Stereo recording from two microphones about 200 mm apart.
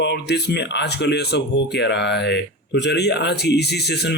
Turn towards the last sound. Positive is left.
turn(degrees=55)  # may be behind; listen again after turning